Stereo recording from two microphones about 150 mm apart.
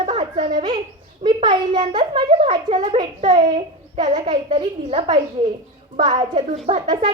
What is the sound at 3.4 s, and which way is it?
A child's voice, 30° right (ahead or behind).